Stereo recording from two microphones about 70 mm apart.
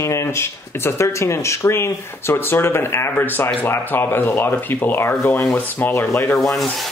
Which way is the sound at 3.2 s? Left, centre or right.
Left.